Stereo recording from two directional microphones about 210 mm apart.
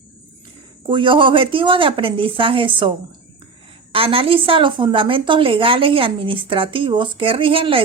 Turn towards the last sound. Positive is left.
turn(degrees=-25)  # may be behind; listen again after turning